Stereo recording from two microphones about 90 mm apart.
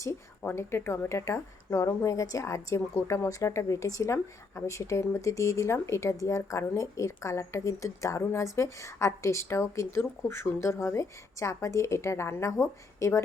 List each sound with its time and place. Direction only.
0.0 s a woman's voice: 30° left (ahead or behind)